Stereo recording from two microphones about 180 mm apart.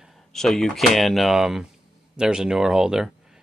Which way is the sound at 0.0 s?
Centre (ahead or behind).